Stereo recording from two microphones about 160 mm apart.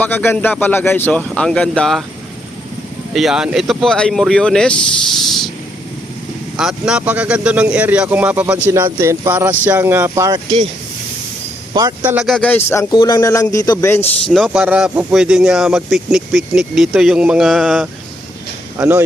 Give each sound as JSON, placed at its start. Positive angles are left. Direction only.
{"t": 0.0, "sound": "speech", "side_deg": 10}
{"t": 3.1, "sound": "speech", "side_deg": 0}
{"t": 6.6, "sound": "speech", "side_deg": -5}
{"t": 11.7, "sound": "speech", "side_deg": -25}
{"t": 12.0, "sound": "speech", "side_deg": -5}
{"t": 12.5, "sound": "speech", "side_deg": 10}
{"t": 12.9, "sound": "a man's voice", "side_deg": 25}
{"t": 14.3, "sound": "speech", "side_deg": 0}
{"t": 18.8, "sound": "speech", "side_deg": -15}